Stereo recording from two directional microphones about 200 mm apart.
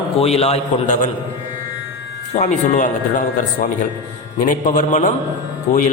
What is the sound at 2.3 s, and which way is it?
Speech, 35° left (ahead or behind).